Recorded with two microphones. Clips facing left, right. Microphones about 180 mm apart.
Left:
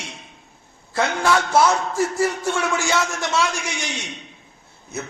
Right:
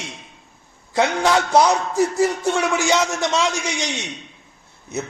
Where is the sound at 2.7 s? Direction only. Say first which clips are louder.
Right 3 dB; 20° right (ahead or behind).